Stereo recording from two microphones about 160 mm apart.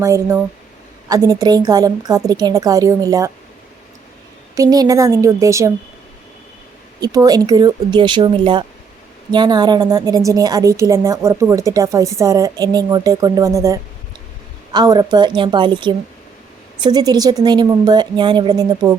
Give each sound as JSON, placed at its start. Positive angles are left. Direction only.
{"t": 0.0, "sound": "a woman's voice", "side_deg": -20}
{"t": 4.5, "sound": "a woman's voice", "side_deg": -25}
{"t": 7.0, "sound": "a woman's voice", "side_deg": -25}